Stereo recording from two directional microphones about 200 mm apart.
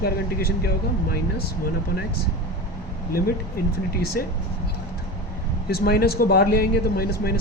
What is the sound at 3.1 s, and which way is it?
Speech, 50° left (ahead or behind).